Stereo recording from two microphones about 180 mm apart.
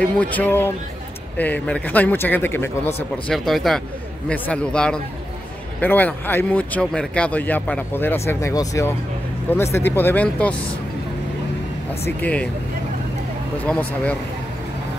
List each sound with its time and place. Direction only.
0.2 s speech: 10° left (ahead or behind)
3.3 s a man's voice: centre (ahead or behind)
12.0 s speech: 10° left (ahead or behind)
13.7 s speech: 10° left (ahead or behind)